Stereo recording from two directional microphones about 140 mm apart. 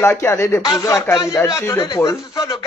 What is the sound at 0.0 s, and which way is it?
Speech, 20° left (ahead or behind).